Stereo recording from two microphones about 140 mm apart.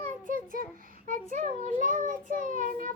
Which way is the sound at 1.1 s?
70° right (ahead or behind).